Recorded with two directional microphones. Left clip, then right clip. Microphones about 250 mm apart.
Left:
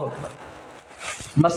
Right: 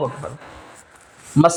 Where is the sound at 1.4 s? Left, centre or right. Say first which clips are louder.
Right 6 dB; right.